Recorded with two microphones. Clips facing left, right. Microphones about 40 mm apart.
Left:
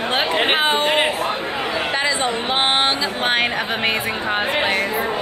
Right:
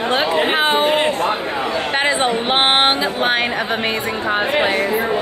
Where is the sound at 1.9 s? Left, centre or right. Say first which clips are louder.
Right 5 dB; right.